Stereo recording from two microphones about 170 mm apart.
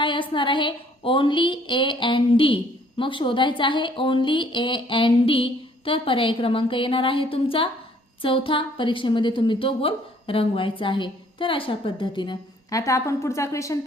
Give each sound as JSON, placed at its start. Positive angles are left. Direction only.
{"t": 0.0, "sound": "a woman's voice", "side_deg": 30}